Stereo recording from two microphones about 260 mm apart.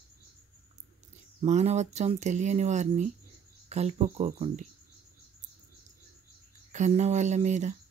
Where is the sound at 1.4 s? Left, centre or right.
Right.